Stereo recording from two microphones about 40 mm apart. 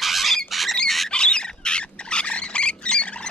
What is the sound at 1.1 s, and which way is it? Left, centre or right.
Squawk, left.